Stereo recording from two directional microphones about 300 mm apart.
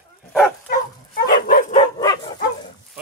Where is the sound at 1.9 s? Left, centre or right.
Centre.